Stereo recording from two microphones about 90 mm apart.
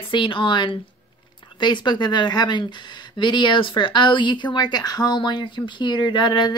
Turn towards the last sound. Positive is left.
turn(degrees=60)  # may be behind; listen again after turning